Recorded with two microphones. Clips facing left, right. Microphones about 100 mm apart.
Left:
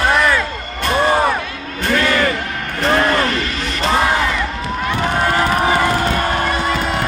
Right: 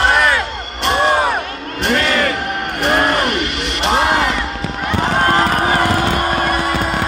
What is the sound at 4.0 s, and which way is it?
Music, 75° right (ahead or behind).